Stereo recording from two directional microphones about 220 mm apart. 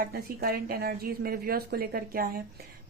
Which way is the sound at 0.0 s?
45° right (ahead or behind).